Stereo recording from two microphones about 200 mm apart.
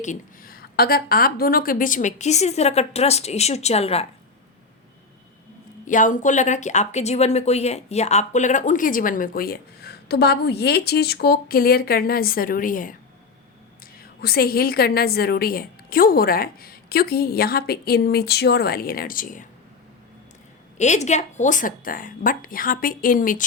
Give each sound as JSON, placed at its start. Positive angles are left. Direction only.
{"t": 0.0, "sound": "a woman's voice", "side_deg": 40}
{"t": 5.8, "sound": "speech", "side_deg": 40}
{"t": 14.0, "sound": "speech", "side_deg": 50}
{"t": 20.7, "sound": "speech", "side_deg": 35}